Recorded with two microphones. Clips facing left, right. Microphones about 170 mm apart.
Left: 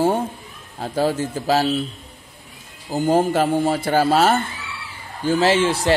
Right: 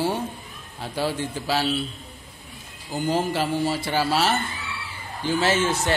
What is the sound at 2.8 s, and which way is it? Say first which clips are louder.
A man's voice: left 6 dB; 45° left (ahead or behind).